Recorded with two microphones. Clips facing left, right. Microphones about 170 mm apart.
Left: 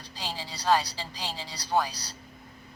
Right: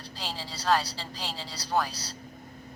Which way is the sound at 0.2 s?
15° left (ahead or behind).